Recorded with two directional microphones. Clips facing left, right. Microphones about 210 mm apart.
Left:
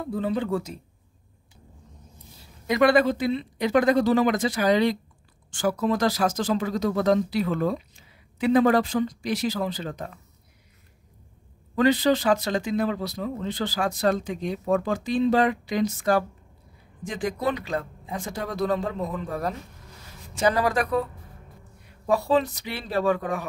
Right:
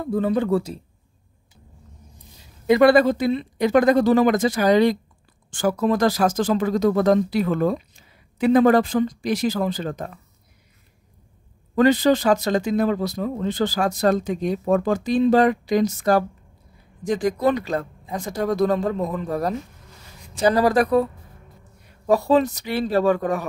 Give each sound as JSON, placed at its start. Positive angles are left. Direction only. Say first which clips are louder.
{"t": 0.1, "sound": "speech", "louder": "right 6 dB", "side_deg": -50}
{"t": 2.6, "sound": "speech", "louder": "right 5 dB", "side_deg": -30}
{"t": 11.7, "sound": "speech", "louder": "right 4 dB", "side_deg": -45}
{"t": 22.1, "sound": "speech", "louder": "right 4 dB", "side_deg": -45}